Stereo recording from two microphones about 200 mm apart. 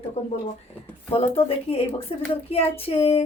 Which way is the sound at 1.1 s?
30° left (ahead or behind).